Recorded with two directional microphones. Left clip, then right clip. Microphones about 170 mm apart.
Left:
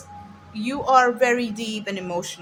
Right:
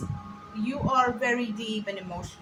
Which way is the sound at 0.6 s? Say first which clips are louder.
Left 7 dB; 85° left.